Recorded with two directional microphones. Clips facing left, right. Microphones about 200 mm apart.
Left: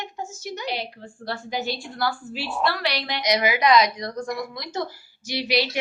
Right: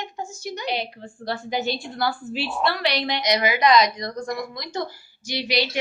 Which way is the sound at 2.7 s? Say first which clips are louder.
Right 4 dB; 20° right (ahead or behind).